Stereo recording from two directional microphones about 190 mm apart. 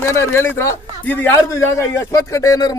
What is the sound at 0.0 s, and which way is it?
Speech, 15° left (ahead or behind).